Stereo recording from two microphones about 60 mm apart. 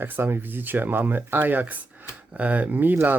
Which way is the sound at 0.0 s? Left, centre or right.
Right.